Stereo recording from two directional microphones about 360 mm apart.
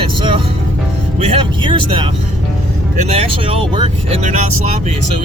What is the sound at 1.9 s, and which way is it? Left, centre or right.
Speech, centre.